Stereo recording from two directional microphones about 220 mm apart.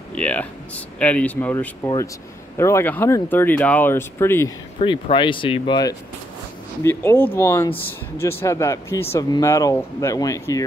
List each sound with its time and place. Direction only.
0.1 s speech: 5° left (ahead or behind)
4.7 s speech: 25° left (ahead or behind)